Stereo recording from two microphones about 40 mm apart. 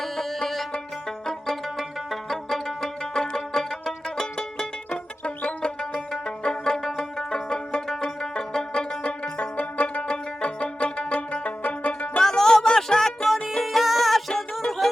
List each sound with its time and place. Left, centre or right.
0.0 s music: centre
2.0 s music: centre
4.9 s music: left
6.8 s music: centre
9.4 s music: left
10.0 s music: left
12.2 s music: centre
13.5 s music: centre